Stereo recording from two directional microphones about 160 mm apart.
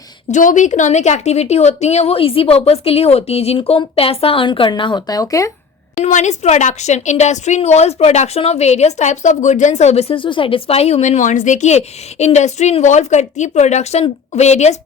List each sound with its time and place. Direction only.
0.3 s a woman's voice: 50° left (ahead or behind); by 5.5 s 20° left (ahead or behind)
6.0 s a woman's voice: 50° left (ahead or behind)